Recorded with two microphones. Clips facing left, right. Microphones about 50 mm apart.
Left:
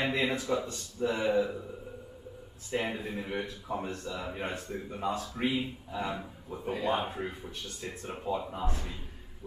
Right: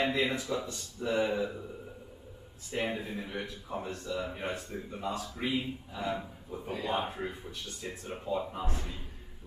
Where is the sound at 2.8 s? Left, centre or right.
Centre.